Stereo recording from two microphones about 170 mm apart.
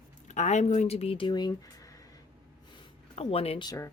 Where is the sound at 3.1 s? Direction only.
35° left (ahead or behind).